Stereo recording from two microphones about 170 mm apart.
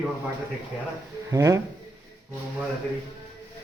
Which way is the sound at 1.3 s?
20° right (ahead or behind).